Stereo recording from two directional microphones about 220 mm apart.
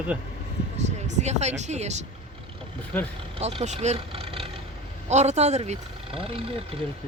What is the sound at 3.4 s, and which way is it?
Speech, 30° right (ahead or behind).